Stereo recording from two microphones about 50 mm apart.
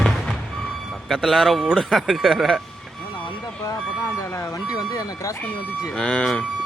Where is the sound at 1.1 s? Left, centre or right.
Centre.